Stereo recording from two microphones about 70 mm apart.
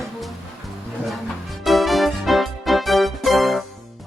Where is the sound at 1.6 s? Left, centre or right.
Centre.